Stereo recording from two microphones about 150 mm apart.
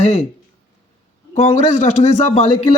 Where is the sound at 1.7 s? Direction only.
50° left (ahead or behind).